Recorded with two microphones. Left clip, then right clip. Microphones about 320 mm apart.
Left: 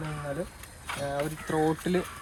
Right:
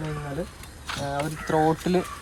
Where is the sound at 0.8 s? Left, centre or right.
Centre.